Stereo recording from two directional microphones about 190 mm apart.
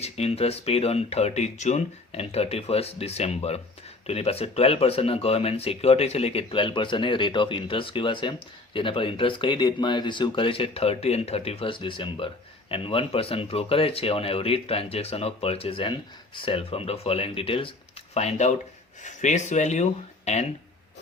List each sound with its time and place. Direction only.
0.0 s speech: 30° left (ahead or behind)